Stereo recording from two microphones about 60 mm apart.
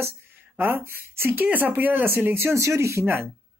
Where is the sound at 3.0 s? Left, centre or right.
Right.